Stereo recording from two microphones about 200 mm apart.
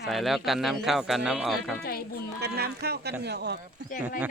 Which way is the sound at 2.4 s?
55° right (ahead or behind).